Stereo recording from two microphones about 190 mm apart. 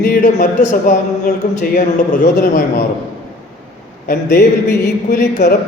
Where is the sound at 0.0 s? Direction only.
45° left (ahead or behind).